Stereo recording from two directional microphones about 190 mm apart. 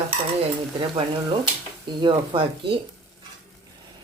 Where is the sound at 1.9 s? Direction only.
25° right (ahead or behind).